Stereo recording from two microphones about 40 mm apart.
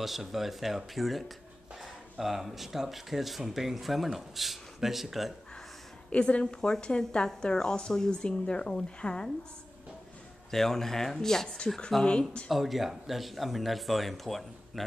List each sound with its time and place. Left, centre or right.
0.0 s speech: centre
6.0 s speech: left
10.5 s speech: centre
12.0 s speech: left
12.4 s speech: centre